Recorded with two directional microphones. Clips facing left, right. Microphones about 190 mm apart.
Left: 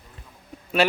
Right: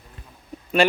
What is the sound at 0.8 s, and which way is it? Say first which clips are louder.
Speech: right 2 dB; 5° left (ahead or behind).